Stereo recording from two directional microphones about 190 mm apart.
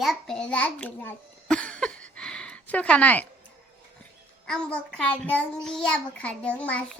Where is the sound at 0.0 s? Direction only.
Centre (ahead or behind).